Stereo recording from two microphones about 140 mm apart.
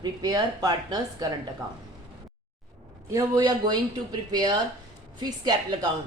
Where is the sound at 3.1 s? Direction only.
25° right (ahead or behind).